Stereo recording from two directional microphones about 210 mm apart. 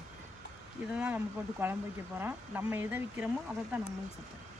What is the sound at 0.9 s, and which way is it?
Speech, 5° right (ahead or behind).